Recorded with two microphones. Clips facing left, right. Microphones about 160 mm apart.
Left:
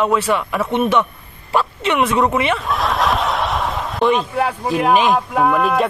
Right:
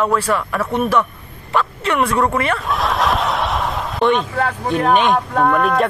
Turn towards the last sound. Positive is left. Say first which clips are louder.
# even
turn(degrees=5)  # may be behind; listen again after turning